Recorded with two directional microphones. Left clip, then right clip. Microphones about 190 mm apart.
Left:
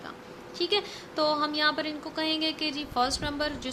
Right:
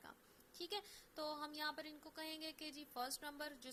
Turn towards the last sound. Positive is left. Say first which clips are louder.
# left 19 dB
turn(degrees=-30)  # may be behind; listen again after turning